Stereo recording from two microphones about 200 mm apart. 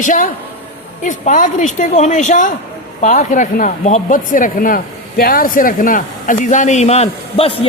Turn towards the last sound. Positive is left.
turn(degrees=30)  # may be behind; listen again after turning